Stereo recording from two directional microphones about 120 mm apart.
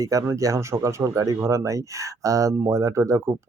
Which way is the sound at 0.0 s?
25° right (ahead or behind).